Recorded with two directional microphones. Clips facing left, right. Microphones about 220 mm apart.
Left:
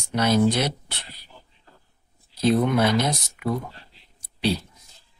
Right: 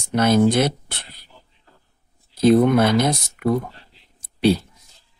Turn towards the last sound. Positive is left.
turn(degrees=-50)  # may be behind; listen again after turning